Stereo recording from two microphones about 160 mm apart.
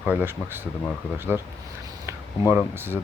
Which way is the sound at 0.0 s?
10° right (ahead or behind).